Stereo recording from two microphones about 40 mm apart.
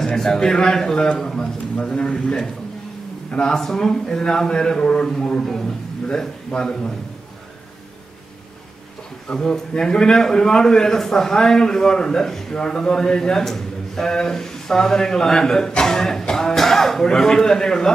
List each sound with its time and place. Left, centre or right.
0.0 s a man's voice: centre
3.5 s speech: centre
6.0 s speech: centre
9.3 s speech: centre